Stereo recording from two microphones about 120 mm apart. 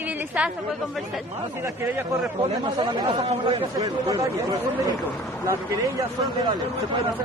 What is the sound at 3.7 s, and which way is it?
Speech, 30° right (ahead or behind).